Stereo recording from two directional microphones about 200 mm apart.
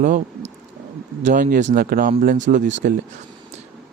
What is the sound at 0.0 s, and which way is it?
Speech, 40° right (ahead or behind).